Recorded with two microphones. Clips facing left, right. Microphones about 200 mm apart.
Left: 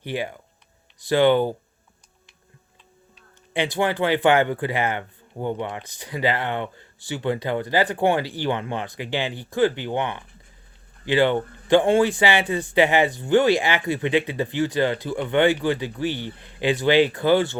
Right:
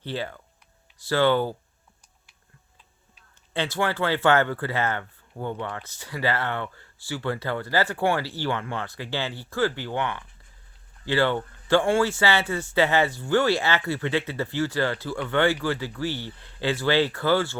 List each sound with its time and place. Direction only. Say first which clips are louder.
0.0 s speech: left 3 dB; 15° left (ahead or behind)
3.5 s speech: left 3 dB; 15° left (ahead or behind)